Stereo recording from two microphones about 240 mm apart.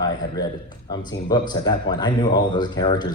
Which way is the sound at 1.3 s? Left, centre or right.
Centre.